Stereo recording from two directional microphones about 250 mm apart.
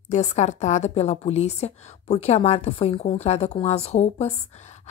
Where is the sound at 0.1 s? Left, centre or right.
Left.